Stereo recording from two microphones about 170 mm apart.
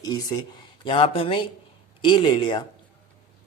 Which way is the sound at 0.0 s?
20° left (ahead or behind).